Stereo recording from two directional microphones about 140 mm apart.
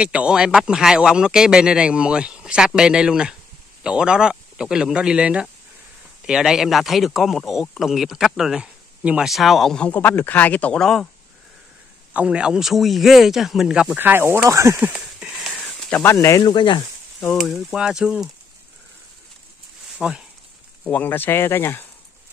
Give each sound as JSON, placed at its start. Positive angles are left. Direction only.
{"t": 0.0, "sound": "speech", "side_deg": -10}
{"t": 12.1, "sound": "speech", "side_deg": -10}
{"t": 14.8, "sound": "a sound", "side_deg": -10}
{"t": 16.0, "sound": "speech", "side_deg": 20}
{"t": 16.5, "sound": "speech", "side_deg": 35}
{"t": 17.4, "sound": "speech", "side_deg": 0}
{"t": 20.0, "sound": "speech", "side_deg": -5}
{"t": 20.8, "sound": "speech", "side_deg": 10}